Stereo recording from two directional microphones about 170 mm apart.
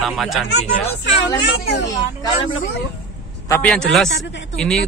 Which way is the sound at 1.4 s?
90° left.